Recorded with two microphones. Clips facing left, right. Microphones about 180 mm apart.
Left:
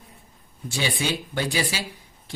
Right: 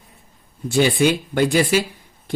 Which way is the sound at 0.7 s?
55° right (ahead or behind).